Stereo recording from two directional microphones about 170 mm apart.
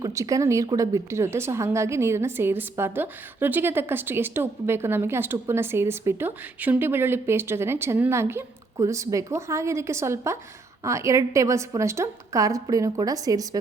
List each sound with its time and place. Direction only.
0.0 s a woman's voice: 20° right (ahead or behind)